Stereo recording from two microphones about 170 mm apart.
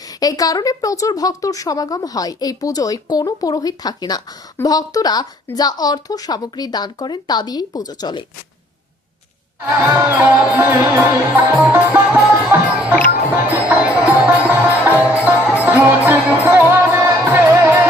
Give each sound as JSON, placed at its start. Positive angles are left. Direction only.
{"t": 0.1, "sound": "a woman's voice", "side_deg": 20}
{"t": 9.6, "sound": "music", "side_deg": -15}